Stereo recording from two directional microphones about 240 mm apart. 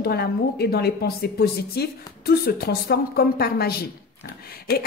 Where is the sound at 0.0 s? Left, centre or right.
Left.